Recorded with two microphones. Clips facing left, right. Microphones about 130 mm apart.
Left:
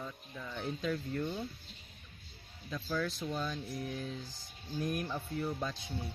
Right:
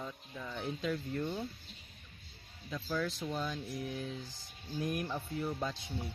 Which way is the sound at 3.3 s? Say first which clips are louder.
Even; 15° right (ahead or behind).